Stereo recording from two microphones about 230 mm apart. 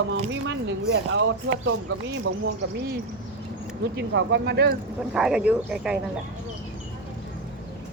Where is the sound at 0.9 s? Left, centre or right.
Right.